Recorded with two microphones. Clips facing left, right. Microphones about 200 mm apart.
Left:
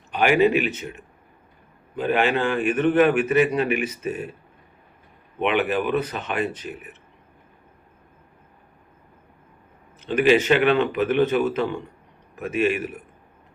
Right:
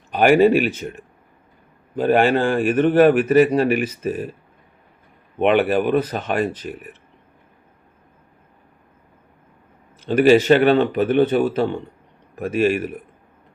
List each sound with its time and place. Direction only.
0.2 s speech: 50° right (ahead or behind)
2.0 s a man's voice: 45° right (ahead or behind)
5.4 s a man's voice: 40° right (ahead or behind)
10.1 s a man's voice: 40° right (ahead or behind)